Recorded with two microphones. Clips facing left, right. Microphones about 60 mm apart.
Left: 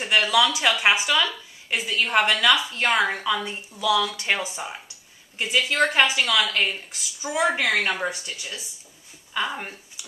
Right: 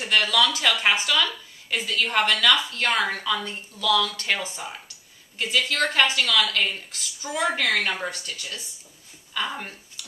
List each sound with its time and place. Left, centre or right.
0.0 s a woman's voice: centre